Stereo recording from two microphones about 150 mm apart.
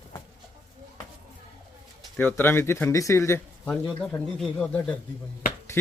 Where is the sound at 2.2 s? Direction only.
10° left (ahead or behind).